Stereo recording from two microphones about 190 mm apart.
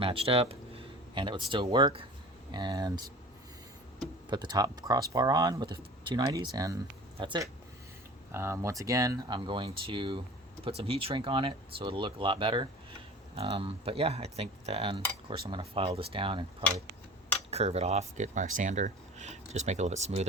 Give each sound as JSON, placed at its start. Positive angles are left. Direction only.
{"t": 0.0, "sound": "speech", "side_deg": -30}
{"t": 4.3, "sound": "speech", "side_deg": -20}